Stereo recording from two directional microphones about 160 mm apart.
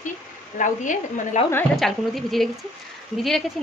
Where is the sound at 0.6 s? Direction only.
50° left (ahead or behind).